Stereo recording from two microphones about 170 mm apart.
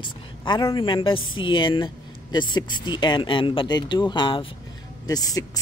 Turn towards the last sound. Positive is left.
turn(degrees=20)  # may be behind; listen again after turning